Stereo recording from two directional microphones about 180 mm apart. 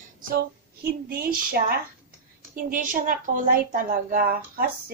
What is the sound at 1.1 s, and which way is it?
Speech, 55° right (ahead or behind).